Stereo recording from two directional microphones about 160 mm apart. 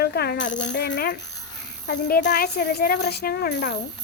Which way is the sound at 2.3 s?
90° left.